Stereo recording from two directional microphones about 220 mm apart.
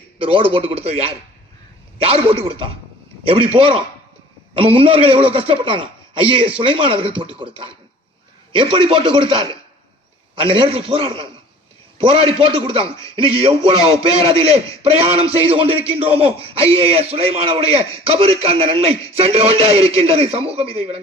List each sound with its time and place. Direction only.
0.2 s a man's voice: 25° right (ahead or behind)